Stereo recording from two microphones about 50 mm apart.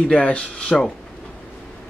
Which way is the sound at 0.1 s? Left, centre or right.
Left.